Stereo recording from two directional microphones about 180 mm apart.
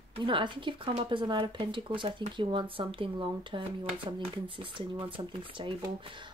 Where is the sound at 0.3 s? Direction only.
25° right (ahead or behind).